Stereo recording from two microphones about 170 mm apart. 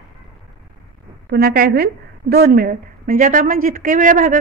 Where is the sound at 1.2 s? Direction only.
65° right (ahead or behind).